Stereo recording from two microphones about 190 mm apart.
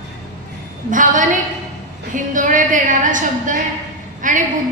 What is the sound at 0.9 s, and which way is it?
Speech, 40° right (ahead or behind).